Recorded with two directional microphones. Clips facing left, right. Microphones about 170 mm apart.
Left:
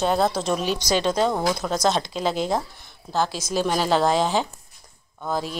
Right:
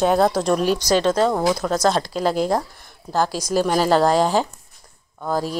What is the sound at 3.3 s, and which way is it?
Speech, 35° right (ahead or behind).